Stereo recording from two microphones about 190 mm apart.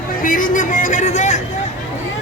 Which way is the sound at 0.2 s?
45° left (ahead or behind).